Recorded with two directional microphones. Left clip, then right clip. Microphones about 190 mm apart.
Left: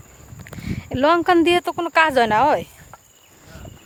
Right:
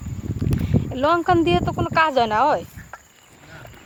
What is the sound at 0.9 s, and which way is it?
Speech, 45° left (ahead or behind).